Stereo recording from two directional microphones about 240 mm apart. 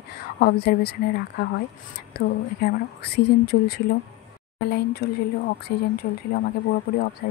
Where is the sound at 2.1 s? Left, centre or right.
Left.